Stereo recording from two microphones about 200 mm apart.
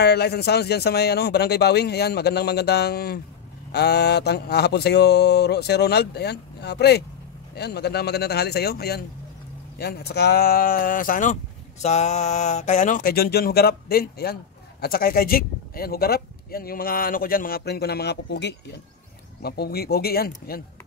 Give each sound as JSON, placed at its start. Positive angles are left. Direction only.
{"t": 0.0, "sound": "mantra", "side_deg": 55}
{"t": 7.5, "sound": "speech", "side_deg": 55}